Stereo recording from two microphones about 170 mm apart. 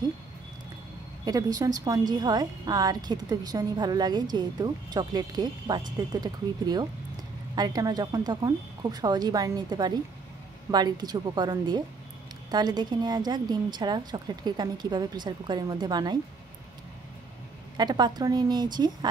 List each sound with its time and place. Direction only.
1.2 s a woman's voice: 20° right (ahead or behind)
17.7 s a woman's voice: 25° right (ahead or behind)